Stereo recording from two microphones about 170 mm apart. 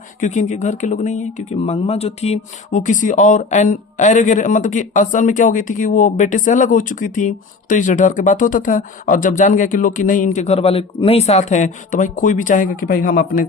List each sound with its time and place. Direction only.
0.2 s speech: 45° left (ahead or behind)